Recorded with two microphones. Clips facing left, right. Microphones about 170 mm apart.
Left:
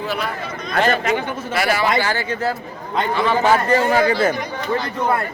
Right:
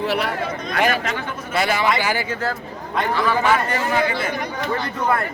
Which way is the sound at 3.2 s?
30° left (ahead or behind).